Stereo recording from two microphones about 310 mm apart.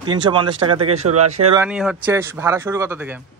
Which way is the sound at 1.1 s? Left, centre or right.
Right.